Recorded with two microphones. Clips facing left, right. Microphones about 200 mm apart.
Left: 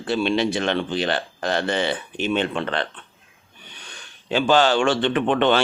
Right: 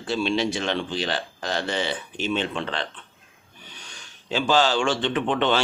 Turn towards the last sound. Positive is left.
turn(degrees=60)  # may be behind; listen again after turning